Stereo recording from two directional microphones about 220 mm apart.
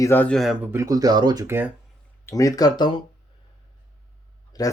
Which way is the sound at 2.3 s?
15° left (ahead or behind).